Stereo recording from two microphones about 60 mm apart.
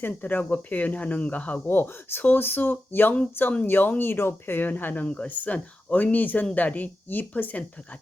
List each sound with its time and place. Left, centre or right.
0.1 s speech: left
1.6 s speech: left
5.0 s speech: left